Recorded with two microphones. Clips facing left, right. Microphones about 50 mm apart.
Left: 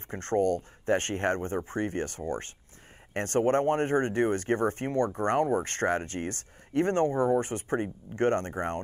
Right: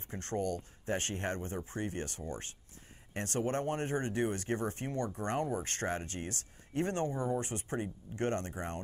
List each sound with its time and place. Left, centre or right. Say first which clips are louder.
0.1 s speech: left 9 dB; left